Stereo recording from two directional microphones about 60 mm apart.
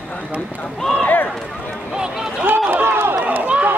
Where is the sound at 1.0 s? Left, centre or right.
Left.